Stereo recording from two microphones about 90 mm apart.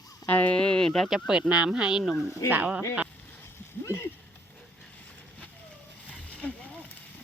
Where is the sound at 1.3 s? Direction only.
10° right (ahead or behind).